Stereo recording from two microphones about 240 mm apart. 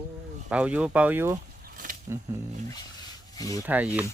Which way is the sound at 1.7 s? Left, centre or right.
Right.